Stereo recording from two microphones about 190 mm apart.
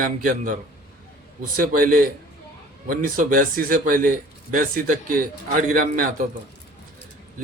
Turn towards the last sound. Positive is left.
turn(degrees=-45)  # may be behind; listen again after turning